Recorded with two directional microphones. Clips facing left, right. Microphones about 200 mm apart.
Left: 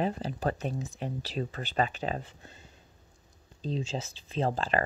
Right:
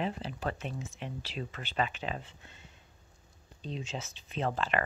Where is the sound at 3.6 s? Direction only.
35° left (ahead or behind).